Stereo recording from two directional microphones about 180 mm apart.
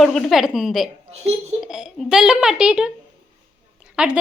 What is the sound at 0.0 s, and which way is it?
A woman's voice, 5° left (ahead or behind).